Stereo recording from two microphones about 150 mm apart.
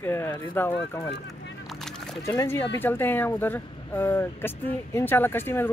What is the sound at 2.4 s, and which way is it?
Speech, 15° left (ahead or behind).